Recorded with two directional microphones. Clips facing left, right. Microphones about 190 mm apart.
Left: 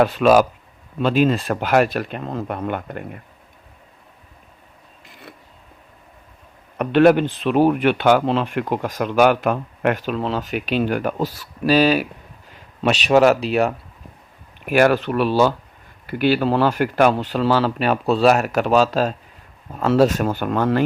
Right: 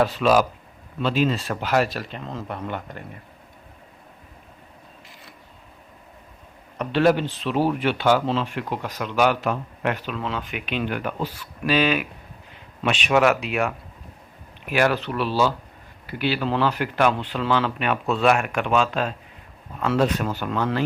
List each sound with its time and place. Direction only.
0.0 s speech: 55° left (ahead or behind)
6.7 s speech: 60° left (ahead or behind)
10.2 s speech: 35° left (ahead or behind)
14.7 s speech: 45° left (ahead or behind)